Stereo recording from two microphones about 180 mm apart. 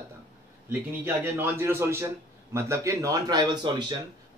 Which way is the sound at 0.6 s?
10° right (ahead or behind).